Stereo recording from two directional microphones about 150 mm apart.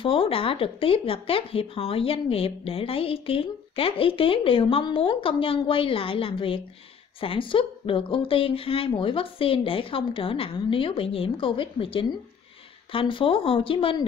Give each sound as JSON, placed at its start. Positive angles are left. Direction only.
{"t": 0.0, "sound": "speech", "side_deg": 35}